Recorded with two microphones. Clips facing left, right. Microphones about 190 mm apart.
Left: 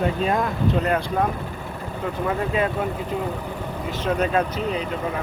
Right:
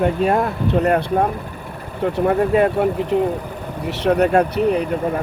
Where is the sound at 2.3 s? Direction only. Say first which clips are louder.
Right 8 dB; 50° right (ahead or behind).